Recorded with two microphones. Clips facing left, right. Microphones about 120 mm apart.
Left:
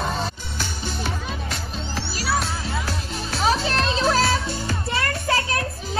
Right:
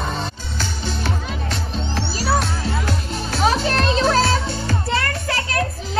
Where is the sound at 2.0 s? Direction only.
30° right (ahead or behind).